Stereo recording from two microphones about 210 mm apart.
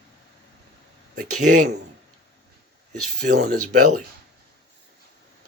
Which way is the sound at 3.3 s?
40° right (ahead or behind).